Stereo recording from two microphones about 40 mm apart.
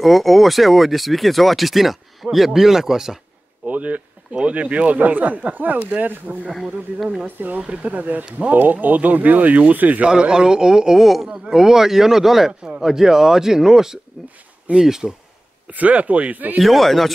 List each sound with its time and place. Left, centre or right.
0.0 s speech: centre
3.6 s a sound: right
4.5 s speech: right
6.5 s speech: centre
7.2 s speech: right
10.0 s a man's voice: centre
15.7 s speech: right
16.6 s speech: centre